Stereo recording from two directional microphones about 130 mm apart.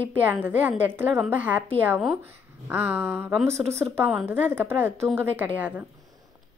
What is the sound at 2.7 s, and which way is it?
A woman's voice, 15° right (ahead or behind).